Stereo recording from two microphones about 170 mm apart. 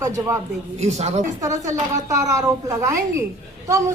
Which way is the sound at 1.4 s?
20° right (ahead or behind).